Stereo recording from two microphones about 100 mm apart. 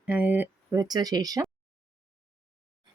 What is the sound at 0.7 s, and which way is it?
Speech, 40° right (ahead or behind).